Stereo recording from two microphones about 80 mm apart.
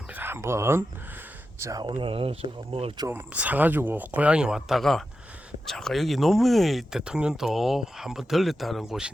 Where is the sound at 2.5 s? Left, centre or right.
Right.